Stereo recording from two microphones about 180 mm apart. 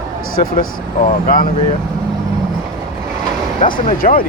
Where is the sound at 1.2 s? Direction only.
50° left (ahead or behind).